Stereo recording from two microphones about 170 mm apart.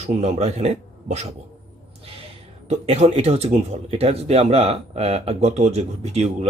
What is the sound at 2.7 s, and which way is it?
Speech, 40° right (ahead or behind).